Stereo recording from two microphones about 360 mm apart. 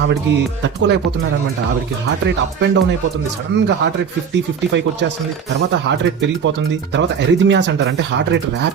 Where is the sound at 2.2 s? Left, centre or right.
Right.